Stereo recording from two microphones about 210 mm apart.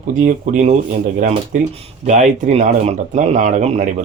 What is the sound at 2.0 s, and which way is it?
A man's voice, 30° right (ahead or behind).